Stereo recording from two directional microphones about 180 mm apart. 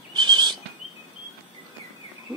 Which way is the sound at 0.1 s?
25° right (ahead or behind).